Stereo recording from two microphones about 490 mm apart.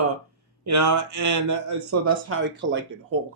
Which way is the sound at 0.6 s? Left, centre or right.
Right.